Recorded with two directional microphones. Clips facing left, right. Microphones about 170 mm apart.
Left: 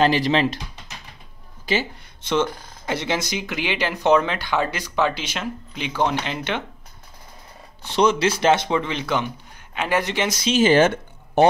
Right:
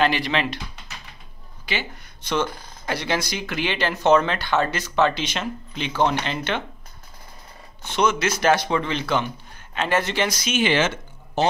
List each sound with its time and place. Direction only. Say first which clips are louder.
0.0 s speech: left 3 dB; 35° left (ahead or behind)
2.2 s speech: left 3 dB; 25° left (ahead or behind)
7.8 s speech: left 3 dB; 35° left (ahead or behind)
10.6 s speech: left 6 dB; 45° left (ahead or behind)